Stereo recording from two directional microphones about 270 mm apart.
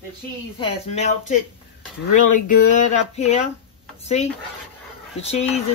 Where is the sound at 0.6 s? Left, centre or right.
Left.